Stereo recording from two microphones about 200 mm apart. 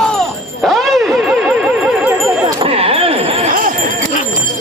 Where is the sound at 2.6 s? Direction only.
30° right (ahead or behind).